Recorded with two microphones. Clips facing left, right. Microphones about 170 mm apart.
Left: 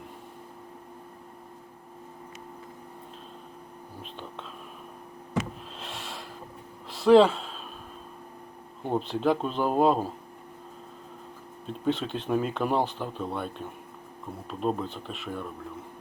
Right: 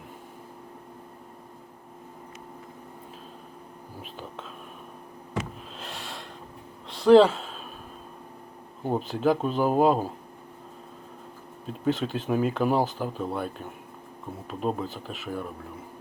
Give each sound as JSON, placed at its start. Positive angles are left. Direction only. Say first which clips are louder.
{"t": 4.0, "sound": "speech", "louder": "right 1 dB", "side_deg": -5}
{"t": 5.8, "sound": "snort", "louder": "right 1 dB", "side_deg": 0}
{"t": 6.9, "sound": "a sound", "louder": "right 2 dB", "side_deg": 0}
{"t": 8.8, "sound": "speech", "louder": "right 1 dB", "side_deg": -5}
{"t": 11.6, "sound": "speech", "louder": "right 2 dB", "side_deg": 0}